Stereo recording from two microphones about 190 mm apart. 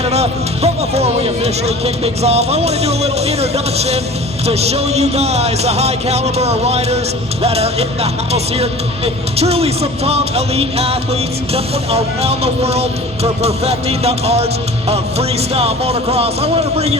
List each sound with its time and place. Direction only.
0.0 s speech: 35° right (ahead or behind)